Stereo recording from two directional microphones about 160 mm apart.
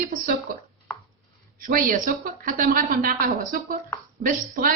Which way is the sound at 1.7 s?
60° right (ahead or behind).